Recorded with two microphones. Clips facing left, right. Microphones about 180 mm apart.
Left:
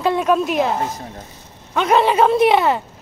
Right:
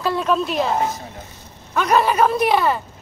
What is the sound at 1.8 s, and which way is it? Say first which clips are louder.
A woman's voice: left 2 dB; 25° left (ahead or behind).